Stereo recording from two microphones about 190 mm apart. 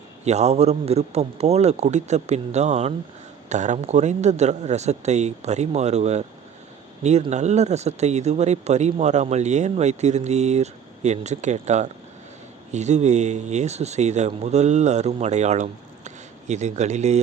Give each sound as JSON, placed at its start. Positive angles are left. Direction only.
{"t": 0.3, "sound": "speech", "side_deg": -35}